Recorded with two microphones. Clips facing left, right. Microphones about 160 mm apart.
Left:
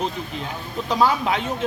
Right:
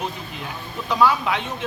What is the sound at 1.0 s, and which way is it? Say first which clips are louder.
Speech: right 1 dB; 40° left (ahead or behind).